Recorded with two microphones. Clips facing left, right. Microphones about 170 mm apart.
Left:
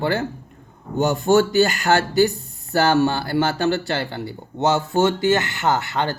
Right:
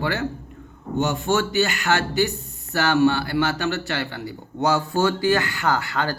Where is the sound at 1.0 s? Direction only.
40° left (ahead or behind).